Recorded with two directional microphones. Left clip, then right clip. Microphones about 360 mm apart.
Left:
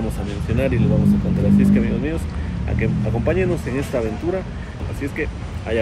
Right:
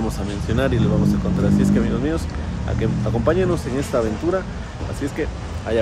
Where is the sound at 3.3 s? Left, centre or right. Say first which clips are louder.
Right 1 dB; right.